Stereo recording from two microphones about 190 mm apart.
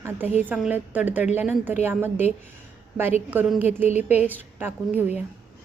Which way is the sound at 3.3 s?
10° right (ahead or behind).